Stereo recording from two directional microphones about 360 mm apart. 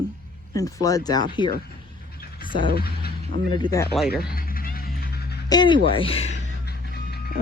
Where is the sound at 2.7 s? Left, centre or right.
Left.